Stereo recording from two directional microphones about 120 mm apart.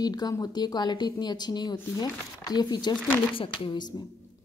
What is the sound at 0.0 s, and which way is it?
Speech, 35° left (ahead or behind).